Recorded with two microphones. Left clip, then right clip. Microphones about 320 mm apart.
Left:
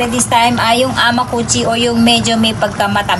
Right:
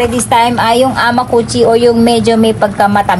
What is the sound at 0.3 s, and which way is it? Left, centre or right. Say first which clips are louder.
A woman's voice: right 2 dB; centre.